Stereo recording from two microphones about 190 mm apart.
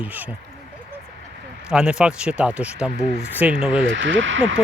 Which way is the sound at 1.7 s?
5° right (ahead or behind).